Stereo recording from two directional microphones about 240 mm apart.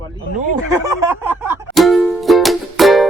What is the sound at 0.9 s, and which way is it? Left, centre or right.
Music, centre.